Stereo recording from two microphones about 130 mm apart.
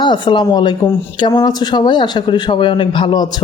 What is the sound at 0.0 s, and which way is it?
Speech, 35° left (ahead or behind).